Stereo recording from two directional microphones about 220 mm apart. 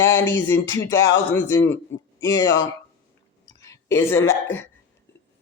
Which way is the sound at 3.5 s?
15° left (ahead or behind).